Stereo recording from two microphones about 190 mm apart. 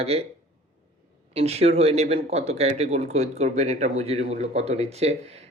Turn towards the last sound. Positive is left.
turn(degrees=-35)  # may be behind; listen again after turning